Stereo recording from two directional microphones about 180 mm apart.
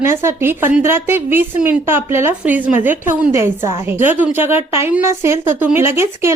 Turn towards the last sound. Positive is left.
turn(degrees=-15)  # may be behind; listen again after turning